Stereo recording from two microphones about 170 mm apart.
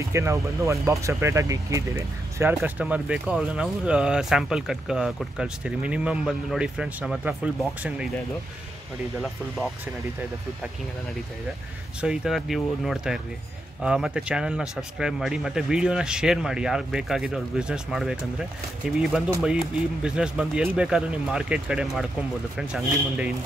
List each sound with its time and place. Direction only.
0.1 s speech: 15° right (ahead or behind)
12.0 s speech: 5° right (ahead or behind)